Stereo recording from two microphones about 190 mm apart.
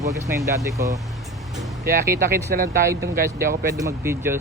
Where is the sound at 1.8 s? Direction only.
50° right (ahead or behind).